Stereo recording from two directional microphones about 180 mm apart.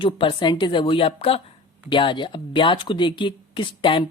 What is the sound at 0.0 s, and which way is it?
Speech, 30° left (ahead or behind).